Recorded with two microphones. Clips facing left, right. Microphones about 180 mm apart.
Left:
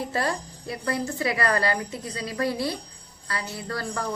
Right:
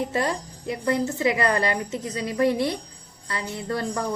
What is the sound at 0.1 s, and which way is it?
A woman's voice, 20° right (ahead or behind).